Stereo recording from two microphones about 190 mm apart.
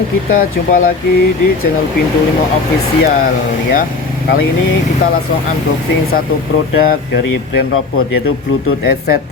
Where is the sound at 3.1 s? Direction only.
45° left (ahead or behind).